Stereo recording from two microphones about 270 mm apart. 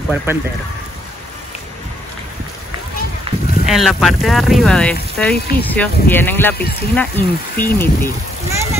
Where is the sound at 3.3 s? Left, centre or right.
Centre.